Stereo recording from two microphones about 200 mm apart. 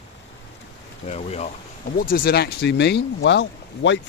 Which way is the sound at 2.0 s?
45° left (ahead or behind).